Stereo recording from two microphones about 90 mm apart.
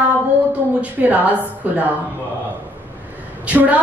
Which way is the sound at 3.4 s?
15° right (ahead or behind).